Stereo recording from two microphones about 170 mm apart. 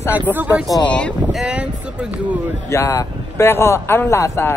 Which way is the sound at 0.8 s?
5° left (ahead or behind).